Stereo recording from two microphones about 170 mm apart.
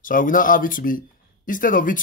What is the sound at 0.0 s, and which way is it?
A man's voice, 55° left (ahead or behind).